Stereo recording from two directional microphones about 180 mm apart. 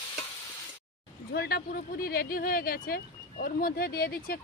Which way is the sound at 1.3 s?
60° left (ahead or behind).